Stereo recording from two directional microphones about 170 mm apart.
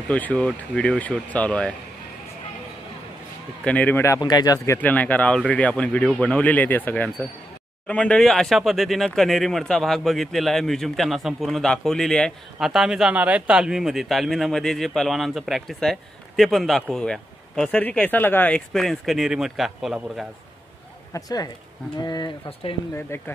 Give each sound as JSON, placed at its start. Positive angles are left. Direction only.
{"t": 0.1, "sound": "speech", "side_deg": 5}
{"t": 3.6, "sound": "speech", "side_deg": 10}
{"t": 4.7, "sound": "speech", "side_deg": 10}
{"t": 21.1, "sound": "speech", "side_deg": 20}
{"t": 22.9, "sound": "speech", "side_deg": 15}